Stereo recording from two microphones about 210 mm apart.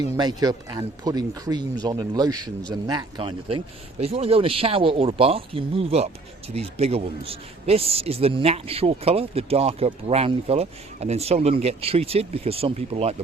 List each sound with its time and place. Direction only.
0.1 s a man's voice: 20° right (ahead or behind)